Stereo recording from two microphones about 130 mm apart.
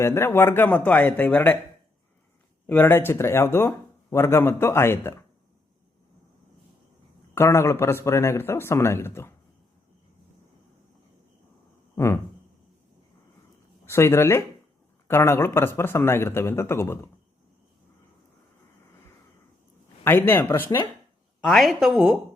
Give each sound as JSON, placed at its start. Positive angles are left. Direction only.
{"t": 0.0, "sound": "speech", "side_deg": 20}
{"t": 2.6, "sound": "speech", "side_deg": 15}
{"t": 7.3, "sound": "speech", "side_deg": 20}
{"t": 11.9, "sound": "speech", "side_deg": 20}
{"t": 13.8, "sound": "speech", "side_deg": 20}
{"t": 20.1, "sound": "speech", "side_deg": 15}
{"t": 21.4, "sound": "a woman's voice", "side_deg": 0}